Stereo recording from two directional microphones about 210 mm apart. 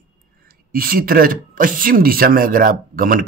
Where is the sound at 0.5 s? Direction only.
45° right (ahead or behind).